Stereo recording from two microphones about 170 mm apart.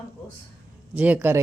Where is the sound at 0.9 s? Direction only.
10° right (ahead or behind).